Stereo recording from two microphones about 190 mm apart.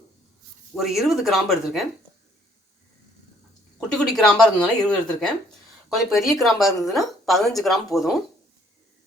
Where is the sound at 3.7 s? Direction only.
5° left (ahead or behind).